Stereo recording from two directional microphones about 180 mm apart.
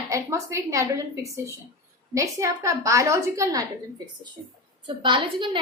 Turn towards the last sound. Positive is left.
turn(degrees=-25)  # may be behind; listen again after turning